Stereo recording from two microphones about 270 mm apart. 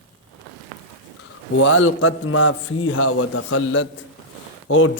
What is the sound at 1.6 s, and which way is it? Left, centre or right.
A man's voice, left.